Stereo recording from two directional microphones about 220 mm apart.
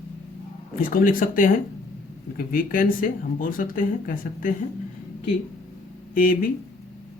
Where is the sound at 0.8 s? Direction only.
40° left (ahead or behind).